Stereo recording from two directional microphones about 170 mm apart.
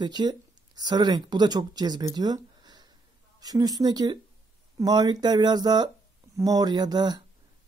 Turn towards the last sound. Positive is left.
turn(degrees=-25)  # may be behind; listen again after turning